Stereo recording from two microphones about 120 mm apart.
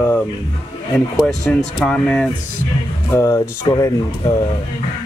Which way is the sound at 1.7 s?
10° left (ahead or behind).